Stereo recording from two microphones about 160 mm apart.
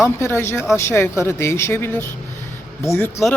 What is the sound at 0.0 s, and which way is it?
Speech, 15° left (ahead or behind).